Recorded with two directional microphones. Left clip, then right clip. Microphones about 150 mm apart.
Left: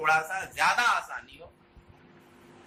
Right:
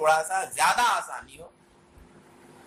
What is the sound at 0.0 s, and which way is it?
Speech, 30° right (ahead or behind).